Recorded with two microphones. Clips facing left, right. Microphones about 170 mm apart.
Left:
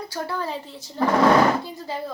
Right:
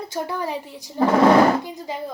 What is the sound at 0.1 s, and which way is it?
A woman's voice, 15° right (ahead or behind).